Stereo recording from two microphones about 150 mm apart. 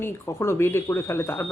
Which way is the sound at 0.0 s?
15° left (ahead or behind).